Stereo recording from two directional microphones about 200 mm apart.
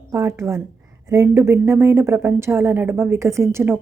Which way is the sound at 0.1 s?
15° right (ahead or behind).